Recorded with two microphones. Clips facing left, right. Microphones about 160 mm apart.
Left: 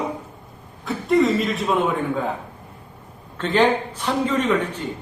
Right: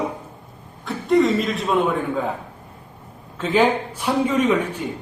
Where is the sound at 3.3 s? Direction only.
5° right (ahead or behind).